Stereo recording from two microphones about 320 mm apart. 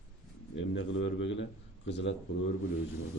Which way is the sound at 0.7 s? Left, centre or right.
Left.